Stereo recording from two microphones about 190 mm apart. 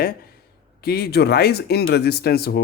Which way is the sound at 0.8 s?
55° left (ahead or behind).